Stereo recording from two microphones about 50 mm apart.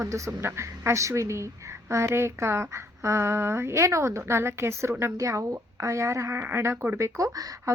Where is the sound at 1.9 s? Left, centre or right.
Right.